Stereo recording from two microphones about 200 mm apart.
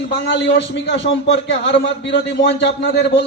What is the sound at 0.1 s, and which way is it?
A man's voice, 60° left (ahead or behind).